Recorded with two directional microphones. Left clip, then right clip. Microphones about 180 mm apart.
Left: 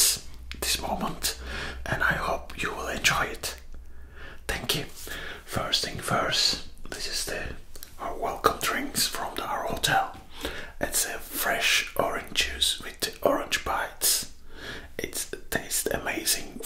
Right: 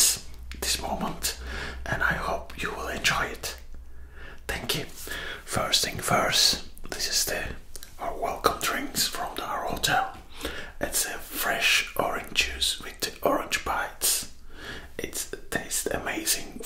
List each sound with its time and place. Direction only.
0.0 s a sound: 35° left (ahead or behind)
5.0 s whispering: 15° left (ahead or behind)
5.5 s whispering: centre (ahead or behind)
8.0 s whispering: 35° left (ahead or behind)